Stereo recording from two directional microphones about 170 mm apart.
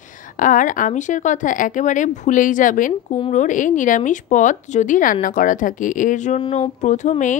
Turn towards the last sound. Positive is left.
turn(degrees=45)  # may be behind; listen again after turning